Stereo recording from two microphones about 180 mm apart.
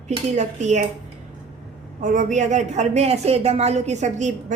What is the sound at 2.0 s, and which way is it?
A woman's voice, 45° right (ahead or behind).